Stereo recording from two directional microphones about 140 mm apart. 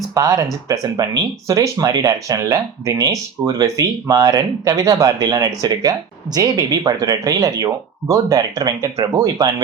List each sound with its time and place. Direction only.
0.1 s speech: 25° right (ahead or behind)